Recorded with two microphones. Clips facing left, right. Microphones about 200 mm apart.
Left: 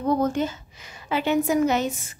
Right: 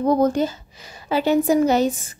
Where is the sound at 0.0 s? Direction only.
40° right (ahead or behind).